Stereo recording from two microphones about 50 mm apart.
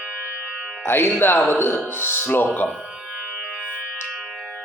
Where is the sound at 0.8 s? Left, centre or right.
Left.